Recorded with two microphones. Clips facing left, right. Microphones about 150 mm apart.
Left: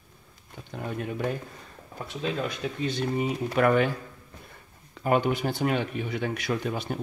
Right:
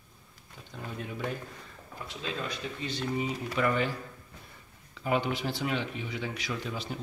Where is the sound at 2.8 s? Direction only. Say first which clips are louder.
Left 5 dB; 55° left (ahead or behind).